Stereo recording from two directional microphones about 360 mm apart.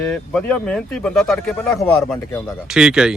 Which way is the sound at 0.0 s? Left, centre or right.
Centre.